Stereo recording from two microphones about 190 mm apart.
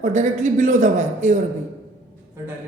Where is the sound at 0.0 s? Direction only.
40° right (ahead or behind).